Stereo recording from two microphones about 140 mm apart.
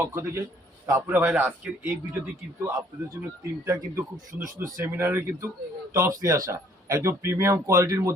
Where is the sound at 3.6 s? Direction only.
20° right (ahead or behind).